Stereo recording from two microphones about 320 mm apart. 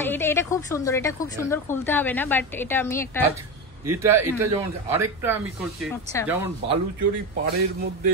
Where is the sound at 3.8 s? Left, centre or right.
Centre.